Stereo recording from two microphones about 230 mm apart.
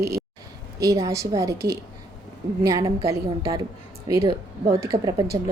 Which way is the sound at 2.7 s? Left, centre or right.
Centre.